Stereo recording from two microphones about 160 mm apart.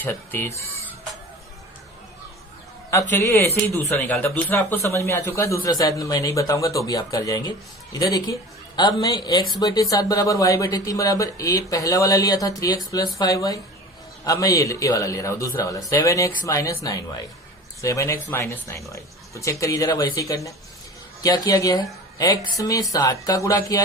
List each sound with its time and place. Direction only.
0.0 s speech: 15° left (ahead or behind)
2.9 s speech: 15° left (ahead or behind)